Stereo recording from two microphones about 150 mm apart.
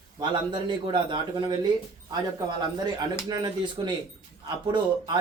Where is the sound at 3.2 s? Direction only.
30° right (ahead or behind).